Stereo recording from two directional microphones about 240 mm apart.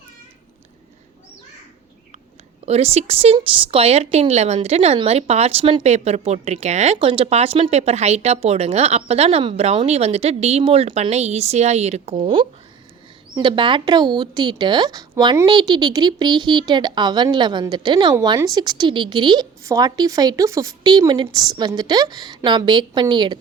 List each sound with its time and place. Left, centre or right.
2.6 s a woman's voice: right